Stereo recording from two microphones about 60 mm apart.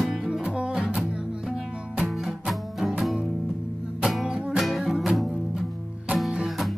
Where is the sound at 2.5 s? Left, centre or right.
Centre.